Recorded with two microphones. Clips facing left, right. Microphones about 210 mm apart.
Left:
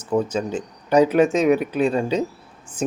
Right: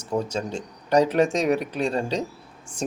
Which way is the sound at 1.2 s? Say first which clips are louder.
Left 4 dB; 5° left (ahead or behind).